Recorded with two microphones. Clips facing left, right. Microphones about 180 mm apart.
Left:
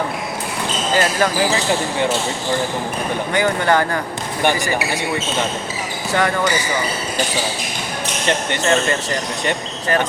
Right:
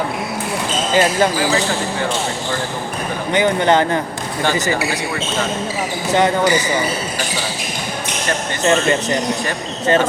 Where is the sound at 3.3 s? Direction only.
20° right (ahead or behind).